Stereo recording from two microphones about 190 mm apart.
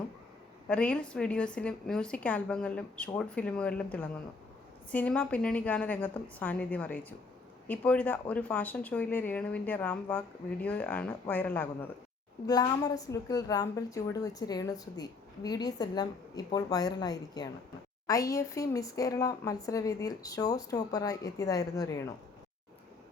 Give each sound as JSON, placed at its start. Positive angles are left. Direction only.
{"t": 0.7, "sound": "a woman's voice", "side_deg": 5}
{"t": 12.5, "sound": "a woman's voice", "side_deg": 20}